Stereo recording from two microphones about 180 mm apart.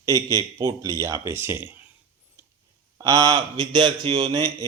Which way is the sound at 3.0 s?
20° right (ahead or behind).